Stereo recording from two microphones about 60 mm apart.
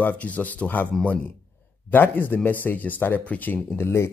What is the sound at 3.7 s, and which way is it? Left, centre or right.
Speech, left.